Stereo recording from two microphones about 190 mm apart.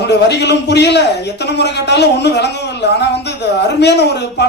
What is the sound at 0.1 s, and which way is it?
A man's voice, 65° left (ahead or behind).